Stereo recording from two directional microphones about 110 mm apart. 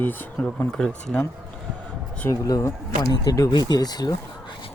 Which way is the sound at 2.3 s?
30° left (ahead or behind).